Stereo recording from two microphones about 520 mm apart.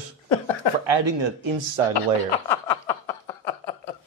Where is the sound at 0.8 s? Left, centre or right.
Right.